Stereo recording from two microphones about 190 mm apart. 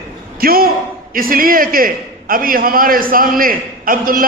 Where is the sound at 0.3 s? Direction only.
50° right (ahead or behind).